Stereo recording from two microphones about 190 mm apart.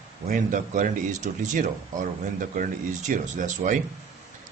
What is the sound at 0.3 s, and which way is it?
Speech, 45° right (ahead or behind).